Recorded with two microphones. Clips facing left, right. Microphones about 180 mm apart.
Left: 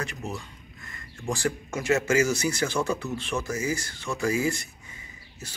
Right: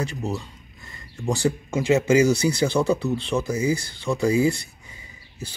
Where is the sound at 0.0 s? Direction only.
35° right (ahead or behind).